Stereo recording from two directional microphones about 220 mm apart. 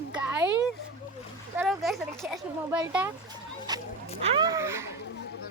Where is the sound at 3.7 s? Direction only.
20° right (ahead or behind).